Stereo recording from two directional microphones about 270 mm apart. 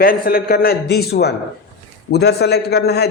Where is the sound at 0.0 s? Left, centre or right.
Left.